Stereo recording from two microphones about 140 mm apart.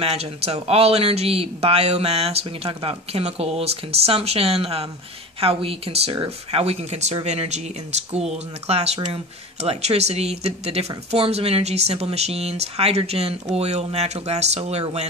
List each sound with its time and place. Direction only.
0.0 s speech: 45° right (ahead or behind)